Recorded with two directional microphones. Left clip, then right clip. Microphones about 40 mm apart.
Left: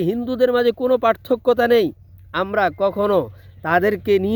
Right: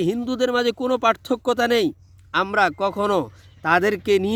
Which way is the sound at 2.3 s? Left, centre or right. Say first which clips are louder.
Even; left.